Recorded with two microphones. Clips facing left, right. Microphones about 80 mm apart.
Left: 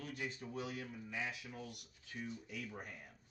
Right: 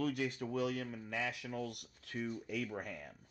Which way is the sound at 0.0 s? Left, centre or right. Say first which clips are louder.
Right 9 dB; right.